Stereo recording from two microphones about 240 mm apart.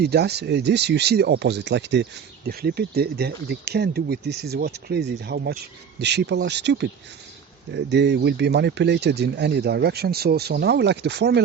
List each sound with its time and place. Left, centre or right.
0.0 s speech: right